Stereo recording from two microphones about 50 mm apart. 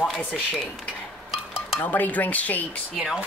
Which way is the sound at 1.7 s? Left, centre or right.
Left.